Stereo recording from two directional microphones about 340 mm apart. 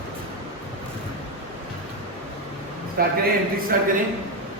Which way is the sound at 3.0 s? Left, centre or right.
Right.